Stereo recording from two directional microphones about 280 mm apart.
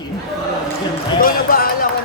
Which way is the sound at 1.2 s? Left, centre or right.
Left.